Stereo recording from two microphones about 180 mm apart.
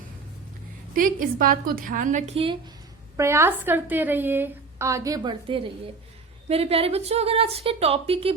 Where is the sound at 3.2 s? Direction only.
15° right (ahead or behind).